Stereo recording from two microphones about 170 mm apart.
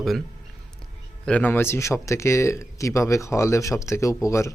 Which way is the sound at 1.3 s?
10° left (ahead or behind).